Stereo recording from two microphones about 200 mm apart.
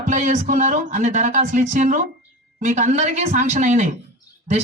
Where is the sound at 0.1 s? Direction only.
35° right (ahead or behind).